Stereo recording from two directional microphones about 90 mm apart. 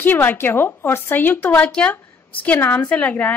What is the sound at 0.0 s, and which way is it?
A woman's voice, 20° left (ahead or behind).